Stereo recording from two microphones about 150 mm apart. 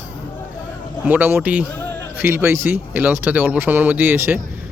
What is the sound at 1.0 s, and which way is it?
A man's voice, 10° right (ahead or behind).